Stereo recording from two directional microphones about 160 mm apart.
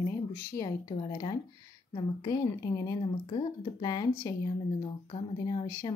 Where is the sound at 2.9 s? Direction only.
25° left (ahead or behind).